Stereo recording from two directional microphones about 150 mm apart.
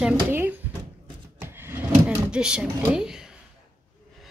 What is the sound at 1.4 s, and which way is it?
Wood, 15° right (ahead or behind).